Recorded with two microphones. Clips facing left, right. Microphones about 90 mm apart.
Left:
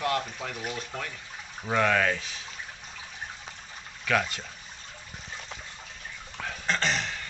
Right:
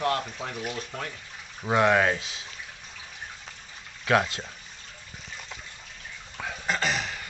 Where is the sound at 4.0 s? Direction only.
30° right (ahead or behind).